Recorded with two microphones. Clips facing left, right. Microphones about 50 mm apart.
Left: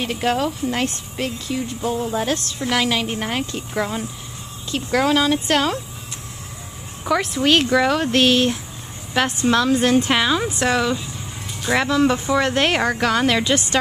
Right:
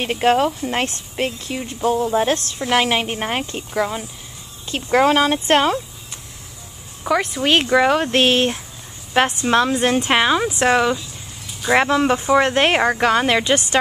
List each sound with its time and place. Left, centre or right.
0.0 s speech: right
3.7 s speech: centre
4.6 s speech: right
7.1 s speech: centre
7.5 s speech: right